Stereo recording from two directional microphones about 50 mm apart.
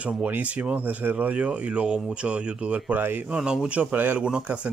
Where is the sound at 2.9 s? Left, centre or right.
Right.